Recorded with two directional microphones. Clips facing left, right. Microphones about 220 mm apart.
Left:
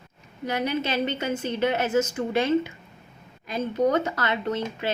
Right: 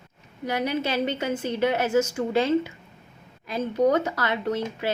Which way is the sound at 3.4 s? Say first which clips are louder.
Right 1 dB; 20° left (ahead or behind).